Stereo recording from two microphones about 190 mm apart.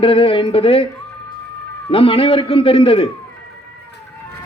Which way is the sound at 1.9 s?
30° left (ahead or behind).